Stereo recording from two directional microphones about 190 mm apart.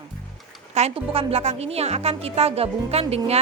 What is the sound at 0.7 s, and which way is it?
A woman's voice, 35° right (ahead or behind).